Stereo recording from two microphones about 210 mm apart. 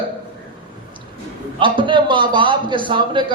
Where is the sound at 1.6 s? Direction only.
25° right (ahead or behind).